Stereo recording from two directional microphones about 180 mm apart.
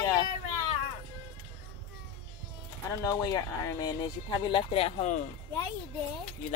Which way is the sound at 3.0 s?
20° left (ahead or behind).